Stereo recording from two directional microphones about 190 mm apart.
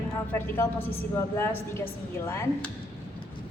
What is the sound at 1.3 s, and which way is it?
A man's voice, 15° left (ahead or behind).